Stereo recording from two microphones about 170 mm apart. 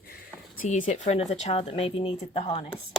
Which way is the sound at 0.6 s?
45° left (ahead or behind).